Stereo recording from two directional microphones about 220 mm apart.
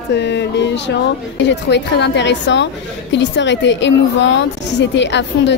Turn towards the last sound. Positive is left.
turn(degrees=55)  # may be behind; listen again after turning